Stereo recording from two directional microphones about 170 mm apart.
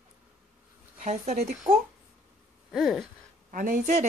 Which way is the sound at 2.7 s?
Centre (ahead or behind).